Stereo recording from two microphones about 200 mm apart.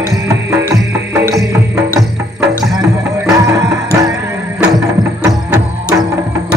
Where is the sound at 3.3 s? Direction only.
15° right (ahead or behind).